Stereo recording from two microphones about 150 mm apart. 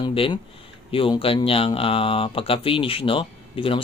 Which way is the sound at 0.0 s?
35° left (ahead or behind).